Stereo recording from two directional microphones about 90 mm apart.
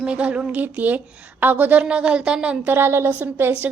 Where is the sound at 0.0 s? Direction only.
15° right (ahead or behind).